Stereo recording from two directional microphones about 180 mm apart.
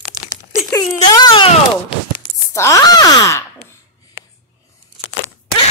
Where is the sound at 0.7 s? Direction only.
20° left (ahead or behind).